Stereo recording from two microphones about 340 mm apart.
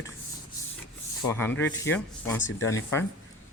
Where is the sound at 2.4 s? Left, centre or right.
Left.